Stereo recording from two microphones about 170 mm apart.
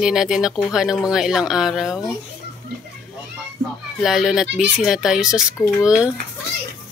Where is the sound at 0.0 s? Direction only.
5° right (ahead or behind).